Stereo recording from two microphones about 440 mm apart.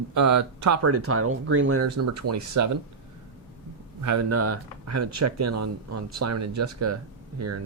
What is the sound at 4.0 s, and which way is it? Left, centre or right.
Speech, right.